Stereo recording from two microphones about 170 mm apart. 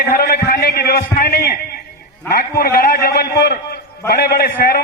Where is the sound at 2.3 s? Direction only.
65° left (ahead or behind).